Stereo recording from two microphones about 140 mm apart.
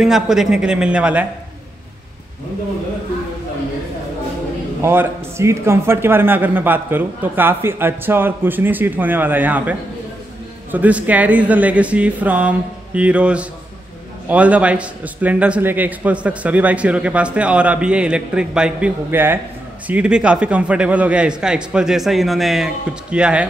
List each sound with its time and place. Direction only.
0.0 s a man's voice: 5° right (ahead or behind)
4.8 s a man's voice: 15° right (ahead or behind)